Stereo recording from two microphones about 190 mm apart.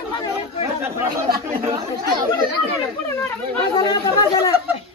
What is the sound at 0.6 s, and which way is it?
Speech, 15° right (ahead or behind).